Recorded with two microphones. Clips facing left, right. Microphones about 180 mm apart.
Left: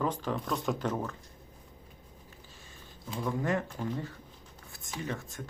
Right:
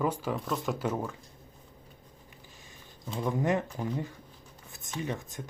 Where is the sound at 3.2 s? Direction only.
20° right (ahead or behind).